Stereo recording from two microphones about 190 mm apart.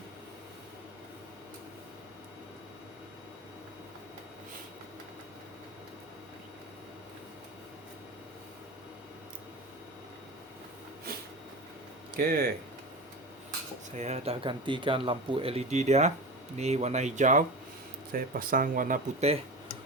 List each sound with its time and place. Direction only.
12.1 s speech: 50° right (ahead or behind)
13.9 s speech: 35° right (ahead or behind)